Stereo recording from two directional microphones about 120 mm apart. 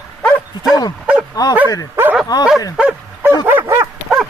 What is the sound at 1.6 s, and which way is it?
Speech, 30° left (ahead or behind).